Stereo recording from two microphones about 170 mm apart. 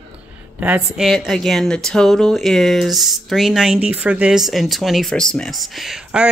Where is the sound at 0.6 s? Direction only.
10° right (ahead or behind).